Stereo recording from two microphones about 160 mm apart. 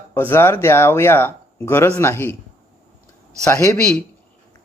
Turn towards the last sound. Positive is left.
turn(degrees=20)  # may be behind; listen again after turning